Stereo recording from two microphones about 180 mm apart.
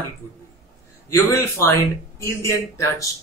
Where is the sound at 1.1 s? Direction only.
15° left (ahead or behind).